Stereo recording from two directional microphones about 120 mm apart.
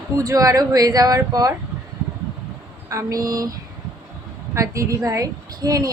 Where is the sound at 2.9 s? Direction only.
25° right (ahead or behind).